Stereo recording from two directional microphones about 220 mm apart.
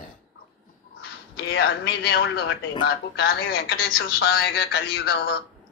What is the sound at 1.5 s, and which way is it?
Speech, 50° left (ahead or behind).